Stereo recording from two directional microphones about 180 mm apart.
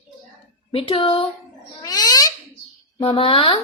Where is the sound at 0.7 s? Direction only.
30° left (ahead or behind).